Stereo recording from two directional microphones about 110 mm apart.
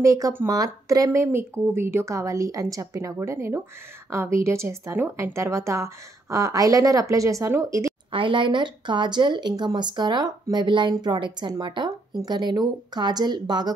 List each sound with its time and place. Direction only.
0.0 s speech: 30° right (ahead or behind)
8.1 s speech: 50° right (ahead or behind)